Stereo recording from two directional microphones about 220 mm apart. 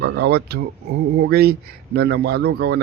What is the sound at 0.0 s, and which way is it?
A man's voice, 50° right (ahead or behind).